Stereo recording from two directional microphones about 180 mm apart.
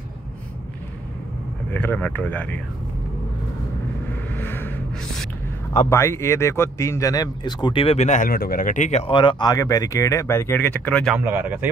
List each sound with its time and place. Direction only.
1.7 s speech: 10° left (ahead or behind)
4.4 s music: 10° left (ahead or behind)
5.7 s speech: 15° left (ahead or behind); by 9.1 s 40° left (ahead or behind)
9.1 s speech: 25° left (ahead or behind); by 11.1 s 5° left (ahead or behind)
11.1 s speech: 10° right (ahead or behind)